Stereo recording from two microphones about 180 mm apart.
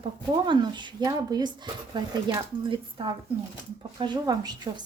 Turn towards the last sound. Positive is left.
turn(degrees=-25)  # may be behind; listen again after turning